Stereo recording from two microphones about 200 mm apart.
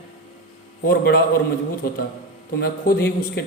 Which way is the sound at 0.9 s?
50° left (ahead or behind).